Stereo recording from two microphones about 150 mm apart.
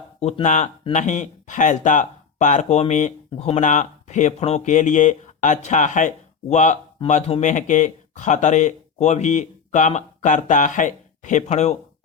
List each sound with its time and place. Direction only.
0.2 s speech: 45° left (ahead or behind)
7.5 s speech: 60° left (ahead or behind)